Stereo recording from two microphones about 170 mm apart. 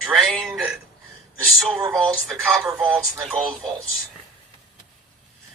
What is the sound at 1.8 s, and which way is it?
Speech, 20° right (ahead or behind).